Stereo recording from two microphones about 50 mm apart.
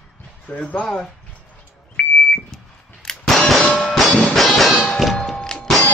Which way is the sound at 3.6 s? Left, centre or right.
Left.